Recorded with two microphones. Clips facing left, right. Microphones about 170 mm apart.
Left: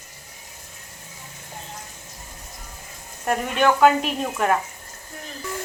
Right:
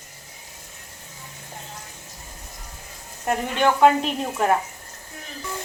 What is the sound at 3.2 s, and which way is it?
Speech, 25° right (ahead or behind).